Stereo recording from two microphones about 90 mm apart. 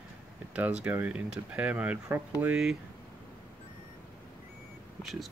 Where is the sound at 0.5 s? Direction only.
15° right (ahead or behind).